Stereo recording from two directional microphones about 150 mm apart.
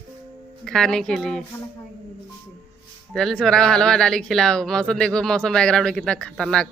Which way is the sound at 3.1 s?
Centre (ahead or behind).